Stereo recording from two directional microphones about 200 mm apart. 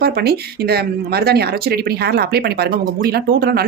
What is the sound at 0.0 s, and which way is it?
Speech, 50° right (ahead or behind).